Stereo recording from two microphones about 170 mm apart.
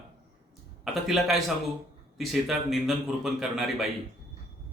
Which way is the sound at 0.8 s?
Centre (ahead or behind).